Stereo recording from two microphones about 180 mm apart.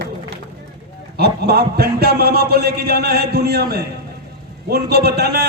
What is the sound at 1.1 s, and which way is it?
A man's voice, 65° right (ahead or behind).